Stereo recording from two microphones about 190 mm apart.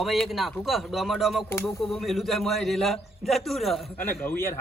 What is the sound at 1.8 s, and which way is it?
A man's voice, centre (ahead or behind).